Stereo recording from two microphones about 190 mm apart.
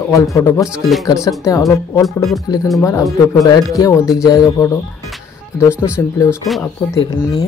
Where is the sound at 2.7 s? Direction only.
15° left (ahead or behind).